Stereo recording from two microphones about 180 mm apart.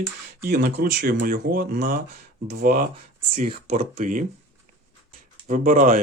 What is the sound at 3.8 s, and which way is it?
Speech, 45° right (ahead or behind).